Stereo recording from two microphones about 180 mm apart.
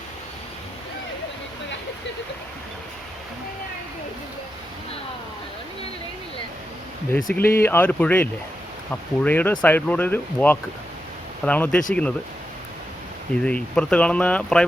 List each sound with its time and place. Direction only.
7.1 s speech: 5° left (ahead or behind)
7.3 s speech: 55° left (ahead or behind)
7.6 s speech: 10° left (ahead or behind)
13.4 s speech: 5° left (ahead or behind)